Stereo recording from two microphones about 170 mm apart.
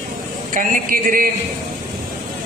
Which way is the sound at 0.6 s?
55° right (ahead or behind).